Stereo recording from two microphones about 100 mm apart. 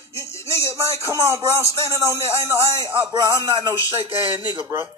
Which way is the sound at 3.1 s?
45° right (ahead or behind).